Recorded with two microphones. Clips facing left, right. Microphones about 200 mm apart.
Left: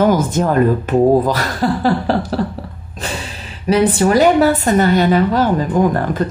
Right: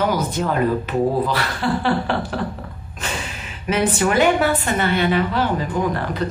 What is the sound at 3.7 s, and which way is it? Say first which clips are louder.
A woman's voice: left 6 dB; 35° left (ahead or behind).